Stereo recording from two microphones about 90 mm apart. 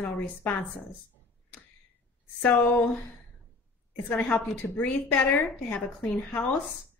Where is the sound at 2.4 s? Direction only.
25° left (ahead or behind).